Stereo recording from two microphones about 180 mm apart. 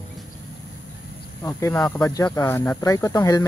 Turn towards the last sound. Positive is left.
turn(degrees=20)  # may be behind; listen again after turning